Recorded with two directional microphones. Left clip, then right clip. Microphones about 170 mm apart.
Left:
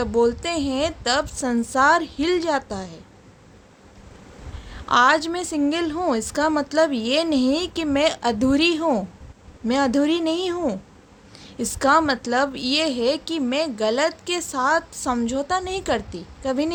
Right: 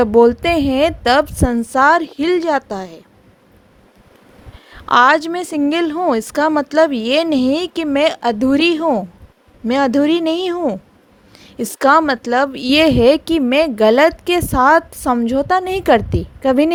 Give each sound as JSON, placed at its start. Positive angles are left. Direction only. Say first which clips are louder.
{"t": 0.0, "sound": "speech", "louder": "right 9 dB", "side_deg": -45}
{"t": 4.7, "sound": "speech", "louder": "right 6 dB", "side_deg": -50}